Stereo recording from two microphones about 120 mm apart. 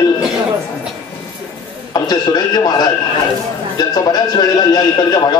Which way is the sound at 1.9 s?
35° left (ahead or behind).